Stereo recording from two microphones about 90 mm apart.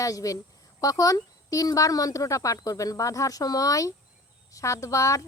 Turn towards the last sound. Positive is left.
turn(degrees=35)  # may be behind; listen again after turning